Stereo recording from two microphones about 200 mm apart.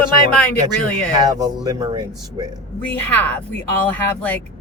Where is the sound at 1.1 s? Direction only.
20° right (ahead or behind).